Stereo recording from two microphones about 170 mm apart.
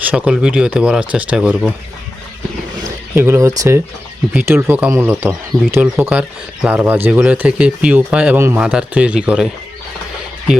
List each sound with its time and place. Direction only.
0.0 s speech: 10° right (ahead or behind)
3.2 s speech: 15° right (ahead or behind)